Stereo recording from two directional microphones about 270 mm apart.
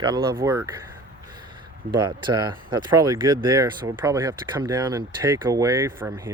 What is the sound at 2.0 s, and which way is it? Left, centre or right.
Speech, centre.